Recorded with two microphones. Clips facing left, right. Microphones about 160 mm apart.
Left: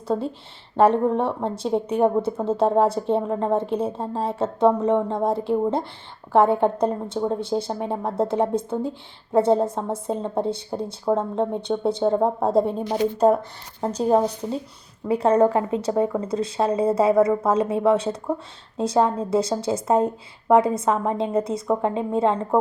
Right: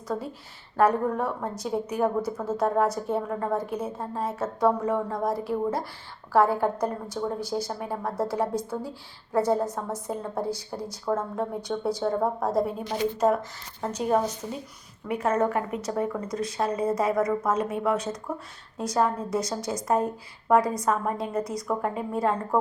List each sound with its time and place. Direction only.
0.1 s a woman's voice: 25° left (ahead or behind)